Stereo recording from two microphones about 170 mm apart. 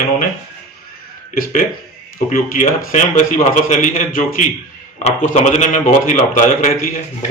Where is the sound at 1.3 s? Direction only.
55° left (ahead or behind).